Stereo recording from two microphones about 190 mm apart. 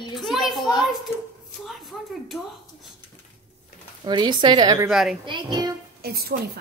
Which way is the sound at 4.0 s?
25° right (ahead or behind).